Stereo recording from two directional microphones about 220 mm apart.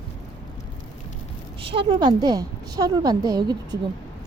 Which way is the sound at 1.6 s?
20° right (ahead or behind).